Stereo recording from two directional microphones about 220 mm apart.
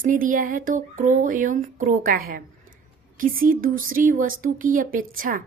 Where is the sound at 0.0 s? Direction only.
40° right (ahead or behind).